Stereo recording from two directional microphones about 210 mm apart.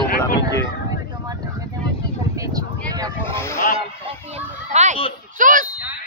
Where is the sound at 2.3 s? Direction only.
15° right (ahead or behind).